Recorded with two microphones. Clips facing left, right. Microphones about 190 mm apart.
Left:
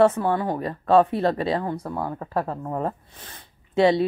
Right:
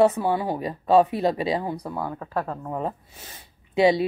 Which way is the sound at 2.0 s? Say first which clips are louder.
Left 2 dB; 10° left (ahead or behind).